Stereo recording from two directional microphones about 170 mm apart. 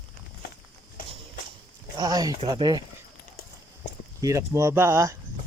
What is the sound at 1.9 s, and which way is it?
Speech, 20° right (ahead or behind).